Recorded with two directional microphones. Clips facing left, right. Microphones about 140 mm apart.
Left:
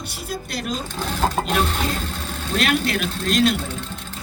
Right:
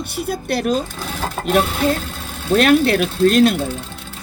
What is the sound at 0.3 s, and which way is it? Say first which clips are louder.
Speech: right 8 dB; 55° right (ahead or behind).